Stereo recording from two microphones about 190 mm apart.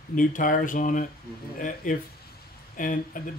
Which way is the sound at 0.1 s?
45° left (ahead or behind).